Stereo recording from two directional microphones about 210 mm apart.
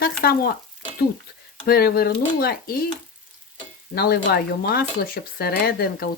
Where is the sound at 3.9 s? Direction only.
50° left (ahead or behind).